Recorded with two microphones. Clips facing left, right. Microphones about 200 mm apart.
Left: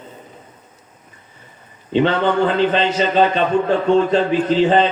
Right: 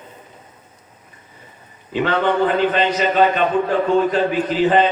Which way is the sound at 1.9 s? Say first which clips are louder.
Left 2 dB; 25° left (ahead or behind).